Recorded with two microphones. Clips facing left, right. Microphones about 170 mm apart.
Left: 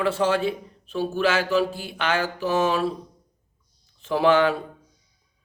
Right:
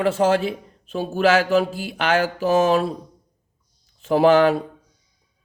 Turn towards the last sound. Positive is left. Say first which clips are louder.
# right 4 dB
turn(degrees=-40)  # may be behind; listen again after turning